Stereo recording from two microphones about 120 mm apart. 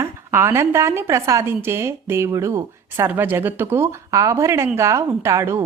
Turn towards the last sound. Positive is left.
turn(degrees=-25)  # may be behind; listen again after turning